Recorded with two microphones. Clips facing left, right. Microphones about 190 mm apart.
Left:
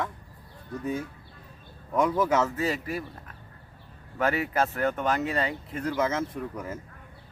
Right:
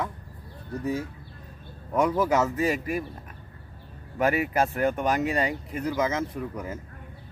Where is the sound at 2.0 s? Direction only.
10° right (ahead or behind).